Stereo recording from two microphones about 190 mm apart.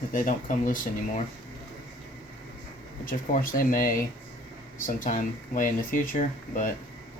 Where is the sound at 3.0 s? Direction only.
45° left (ahead or behind).